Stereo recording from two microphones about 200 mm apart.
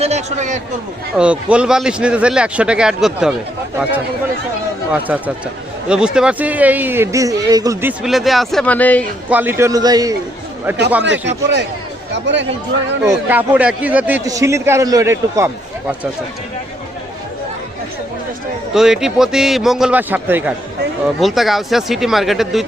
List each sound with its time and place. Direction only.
0.0 s a man's voice: 35° right (ahead or behind)
1.1 s a man's voice: 5° right (ahead or behind)
4.9 s a man's voice: 10° right (ahead or behind); by 9.0 s 10° left (ahead or behind)
9.3 s a man's voice: 10° right (ahead or behind)
11.0 s speech: 65° right (ahead or behind)
13.0 s a man's voice: 10° right (ahead or behind)
18.7 s a man's voice: 5° right (ahead or behind)